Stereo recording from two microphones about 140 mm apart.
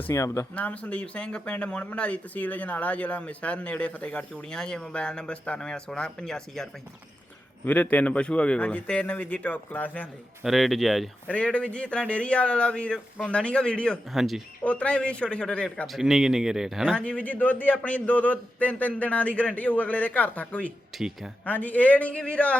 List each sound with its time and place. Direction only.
0.1 s speech: 20° left (ahead or behind)
0.5 s a man's voice: 10° left (ahead or behind)
10.4 s a man's voice: centre (ahead or behind)
14.6 s a man's voice: 10° left (ahead or behind)
20.9 s speech: centre (ahead or behind)
21.4 s a man's voice: 10° left (ahead or behind)